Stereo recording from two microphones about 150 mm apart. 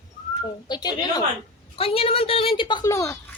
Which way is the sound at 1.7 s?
40° left (ahead or behind).